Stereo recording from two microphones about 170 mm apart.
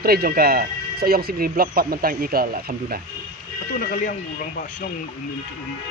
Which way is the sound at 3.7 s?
50° left (ahead or behind).